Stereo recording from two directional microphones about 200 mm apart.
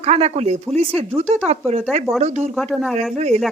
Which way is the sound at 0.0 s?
35° right (ahead or behind).